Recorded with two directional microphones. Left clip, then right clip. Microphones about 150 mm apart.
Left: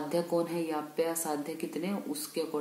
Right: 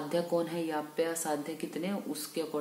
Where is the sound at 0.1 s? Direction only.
20° left (ahead or behind).